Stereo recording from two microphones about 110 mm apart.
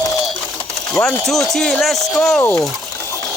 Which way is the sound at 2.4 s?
15° left (ahead or behind).